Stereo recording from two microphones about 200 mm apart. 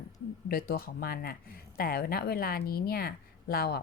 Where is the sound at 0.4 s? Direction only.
50° left (ahead or behind).